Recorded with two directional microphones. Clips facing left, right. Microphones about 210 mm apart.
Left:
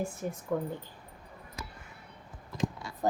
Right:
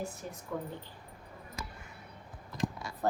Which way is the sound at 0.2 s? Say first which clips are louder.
Left 7 dB; 50° left (ahead or behind).